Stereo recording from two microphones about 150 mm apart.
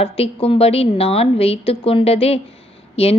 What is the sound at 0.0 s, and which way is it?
A woman's voice, 40° left (ahead or behind).